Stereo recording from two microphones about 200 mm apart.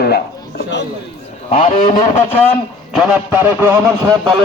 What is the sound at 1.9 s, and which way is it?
Speech, 20° left (ahead or behind).